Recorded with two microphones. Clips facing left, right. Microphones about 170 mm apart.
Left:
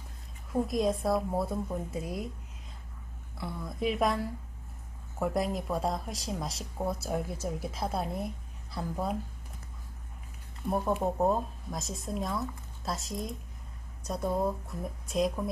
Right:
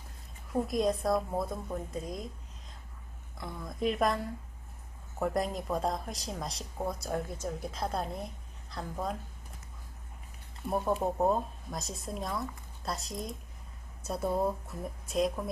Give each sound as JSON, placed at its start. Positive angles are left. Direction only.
{"t": 0.5, "sound": "speech", "side_deg": 0}
{"t": 3.3, "sound": "a woman's voice", "side_deg": 5}
{"t": 10.6, "sound": "speech", "side_deg": 0}